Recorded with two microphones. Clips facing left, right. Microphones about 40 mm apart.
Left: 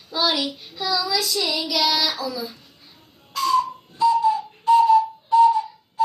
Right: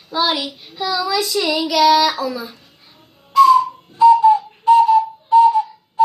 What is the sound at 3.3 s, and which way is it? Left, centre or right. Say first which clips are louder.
Whistle: right 10 dB; centre.